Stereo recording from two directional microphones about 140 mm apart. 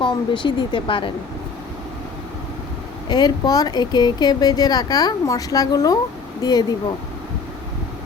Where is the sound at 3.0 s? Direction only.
30° left (ahead or behind).